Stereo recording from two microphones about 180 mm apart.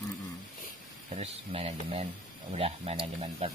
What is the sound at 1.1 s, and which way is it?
Speech, 35° right (ahead or behind).